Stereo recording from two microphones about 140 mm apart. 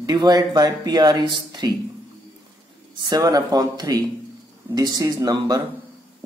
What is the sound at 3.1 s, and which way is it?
Speech, 25° right (ahead or behind).